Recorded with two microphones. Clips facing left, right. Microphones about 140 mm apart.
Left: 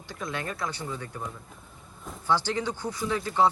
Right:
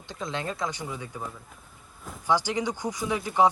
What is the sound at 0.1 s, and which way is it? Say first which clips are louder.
Speech: right 2 dB; 20° right (ahead or behind).